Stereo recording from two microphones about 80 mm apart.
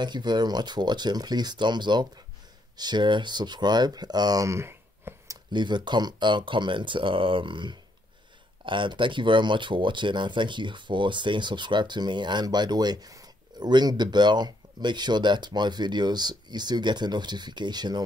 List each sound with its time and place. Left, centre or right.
0.0 s speech: right
4.5 s a sound: right
5.5 s speech: right